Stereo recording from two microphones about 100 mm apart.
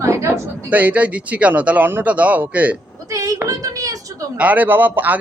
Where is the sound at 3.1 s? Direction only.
35° right (ahead or behind).